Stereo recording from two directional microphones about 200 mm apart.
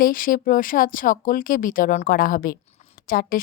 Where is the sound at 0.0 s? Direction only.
45° left (ahead or behind).